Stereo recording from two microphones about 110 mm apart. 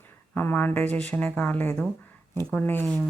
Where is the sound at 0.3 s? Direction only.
20° left (ahead or behind).